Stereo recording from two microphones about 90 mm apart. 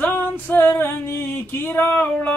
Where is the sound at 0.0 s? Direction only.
20° left (ahead or behind).